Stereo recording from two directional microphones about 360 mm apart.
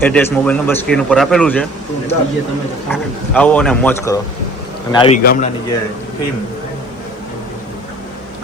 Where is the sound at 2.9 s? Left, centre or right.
Centre.